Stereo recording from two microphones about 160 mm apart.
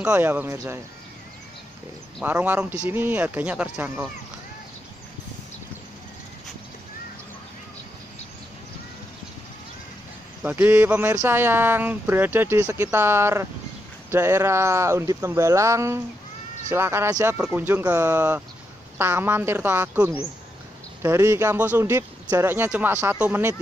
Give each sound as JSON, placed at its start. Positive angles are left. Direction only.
{"t": 0.0, "sound": "speech", "side_deg": -10}
{"t": 2.2, "sound": "speech", "side_deg": -10}
{"t": 10.4, "sound": "speech", "side_deg": -10}